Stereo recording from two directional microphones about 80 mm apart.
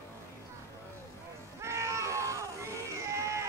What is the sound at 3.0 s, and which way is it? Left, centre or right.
Music, right.